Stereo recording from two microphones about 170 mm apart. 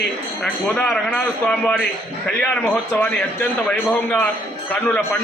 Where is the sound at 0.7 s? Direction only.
5° left (ahead or behind).